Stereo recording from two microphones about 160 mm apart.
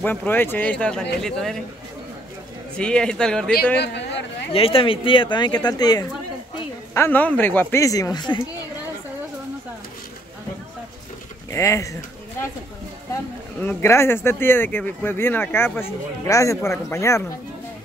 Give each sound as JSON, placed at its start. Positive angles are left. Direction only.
{"t": 0.0, "sound": "a man's voice", "side_deg": 10}
{"t": 2.7, "sound": "a man's voice", "side_deg": 5}
{"t": 3.8, "sound": "a sound", "side_deg": 90}
{"t": 4.5, "sound": "speech", "side_deg": 35}
{"t": 6.9, "sound": "speech", "side_deg": 15}
{"t": 11.5, "sound": "speech", "side_deg": 20}
{"t": 13.1, "sound": "speech", "side_deg": 15}